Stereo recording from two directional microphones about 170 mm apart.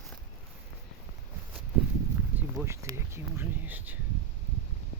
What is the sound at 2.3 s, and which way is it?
Speech, 10° right (ahead or behind).